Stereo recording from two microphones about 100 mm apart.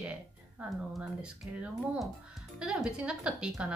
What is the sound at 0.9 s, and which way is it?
Speech, 5° right (ahead or behind).